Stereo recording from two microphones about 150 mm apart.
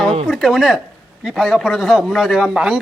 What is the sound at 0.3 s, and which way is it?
A man's voice, centre (ahead or behind).